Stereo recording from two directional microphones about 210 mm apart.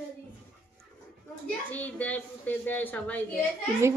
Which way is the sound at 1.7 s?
10° left (ahead or behind).